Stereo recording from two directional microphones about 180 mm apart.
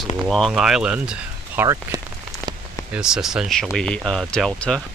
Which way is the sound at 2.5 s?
25° right (ahead or behind).